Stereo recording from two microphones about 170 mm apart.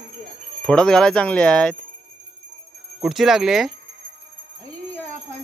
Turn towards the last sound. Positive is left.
turn(degrees=0)  # may be behind; listen again after turning